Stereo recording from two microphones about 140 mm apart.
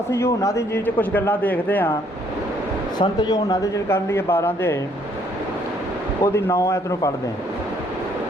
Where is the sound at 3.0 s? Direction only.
30° left (ahead or behind).